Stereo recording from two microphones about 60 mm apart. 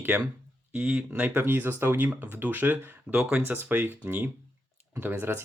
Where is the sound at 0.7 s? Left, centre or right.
Centre.